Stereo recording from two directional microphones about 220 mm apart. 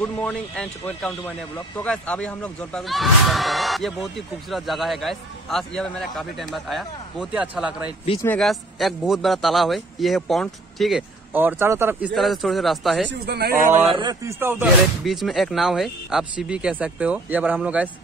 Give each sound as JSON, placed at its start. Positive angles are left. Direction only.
{"t": 0.0, "sound": "speech", "side_deg": 5}
{"t": 8.2, "sound": "speech", "side_deg": 5}
{"t": 13.2, "sound": "speech", "side_deg": -45}
{"t": 13.9, "sound": "speech", "side_deg": -15}